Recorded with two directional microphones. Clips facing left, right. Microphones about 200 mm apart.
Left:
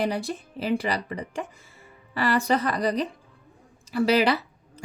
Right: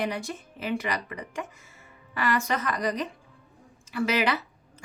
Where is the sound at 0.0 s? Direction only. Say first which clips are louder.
Left 4 dB; 35° left (ahead or behind).